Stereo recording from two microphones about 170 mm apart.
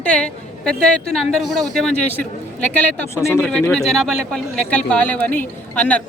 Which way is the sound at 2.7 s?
15° left (ahead or behind).